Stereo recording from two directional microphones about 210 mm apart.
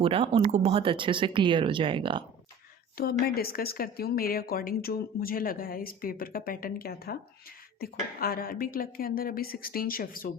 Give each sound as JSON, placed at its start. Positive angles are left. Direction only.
{"t": 0.0, "sound": "speech", "side_deg": -25}
{"t": 3.0, "sound": "speech", "side_deg": 45}